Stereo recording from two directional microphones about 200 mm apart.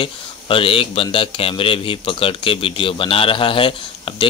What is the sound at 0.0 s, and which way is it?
A man's voice, 25° left (ahead or behind).